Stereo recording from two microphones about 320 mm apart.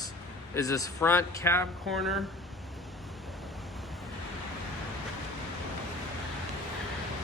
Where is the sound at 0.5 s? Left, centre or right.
Centre.